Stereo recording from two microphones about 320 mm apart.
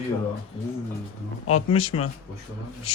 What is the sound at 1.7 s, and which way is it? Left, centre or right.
Speech, centre.